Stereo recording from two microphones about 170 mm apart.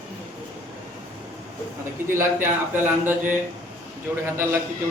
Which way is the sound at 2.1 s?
15° right (ahead or behind).